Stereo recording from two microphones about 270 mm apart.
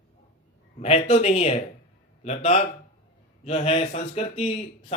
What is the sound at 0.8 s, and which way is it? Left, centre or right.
A man's voice, left.